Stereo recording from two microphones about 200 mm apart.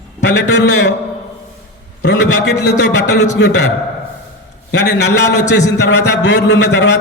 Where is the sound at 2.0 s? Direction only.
55° left (ahead or behind).